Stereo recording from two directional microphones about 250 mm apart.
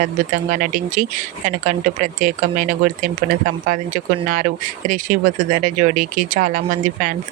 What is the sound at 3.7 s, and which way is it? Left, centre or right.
Speech, right.